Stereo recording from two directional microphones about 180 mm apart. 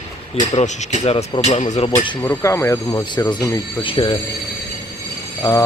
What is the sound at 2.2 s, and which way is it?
Speech, 15° left (ahead or behind).